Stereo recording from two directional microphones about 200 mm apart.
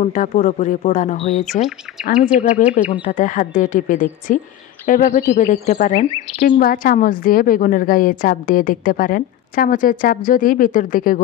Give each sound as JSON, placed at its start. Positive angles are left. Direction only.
{"t": 0.0, "sound": "a woman's voice", "side_deg": 40}